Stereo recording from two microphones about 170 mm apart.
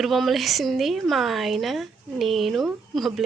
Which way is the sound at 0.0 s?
Centre (ahead or behind).